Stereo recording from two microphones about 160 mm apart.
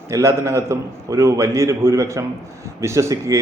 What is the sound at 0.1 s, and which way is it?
A man's voice, 20° right (ahead or behind).